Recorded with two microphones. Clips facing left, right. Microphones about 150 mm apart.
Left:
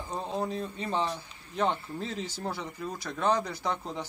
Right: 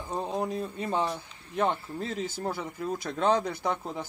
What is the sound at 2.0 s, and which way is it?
Speech, 50° right (ahead or behind).